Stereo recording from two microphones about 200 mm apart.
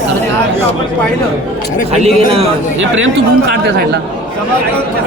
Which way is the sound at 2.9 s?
75° right (ahead or behind).